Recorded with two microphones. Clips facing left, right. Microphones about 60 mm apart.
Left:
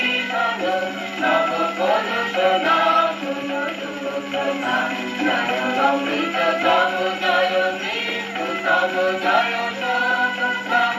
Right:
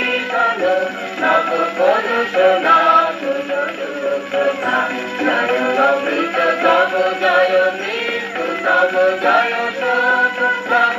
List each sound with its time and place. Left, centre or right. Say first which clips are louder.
0.3 s music: right 7 dB; right
4.4 s music: right 4 dB; right
8.6 s music: right 5 dB; right